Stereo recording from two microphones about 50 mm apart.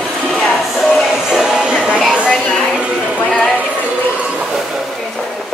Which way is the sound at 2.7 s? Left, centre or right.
Right.